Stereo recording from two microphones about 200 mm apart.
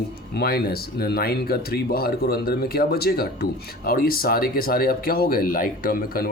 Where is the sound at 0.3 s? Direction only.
50° left (ahead or behind).